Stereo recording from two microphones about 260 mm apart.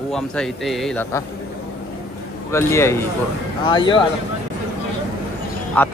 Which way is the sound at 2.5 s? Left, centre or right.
Centre.